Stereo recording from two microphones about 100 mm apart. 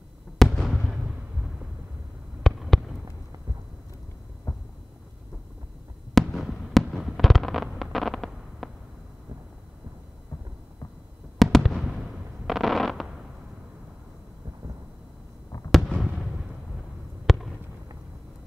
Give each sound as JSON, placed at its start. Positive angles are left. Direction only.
{"t": 0.4, "sound": "fireworks", "side_deg": 0}
{"t": 2.4, "sound": "fireworks", "side_deg": 0}
{"t": 4.5, "sound": "a sound", "side_deg": 30}
{"t": 6.1, "sound": "fireworks", "side_deg": 0}
{"t": 11.3, "sound": "fireworks", "side_deg": 0}
{"t": 15.7, "sound": "fireworks", "side_deg": 0}
{"t": 17.3, "sound": "fireworks", "side_deg": 0}